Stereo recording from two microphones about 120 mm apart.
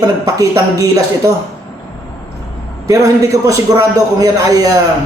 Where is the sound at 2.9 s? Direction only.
30° right (ahead or behind).